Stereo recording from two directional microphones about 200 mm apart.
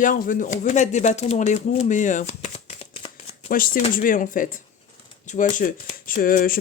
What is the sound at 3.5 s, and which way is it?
Speech, 45° left (ahead or behind).